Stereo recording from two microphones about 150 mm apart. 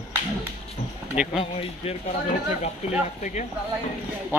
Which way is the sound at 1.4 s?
40° left (ahead or behind).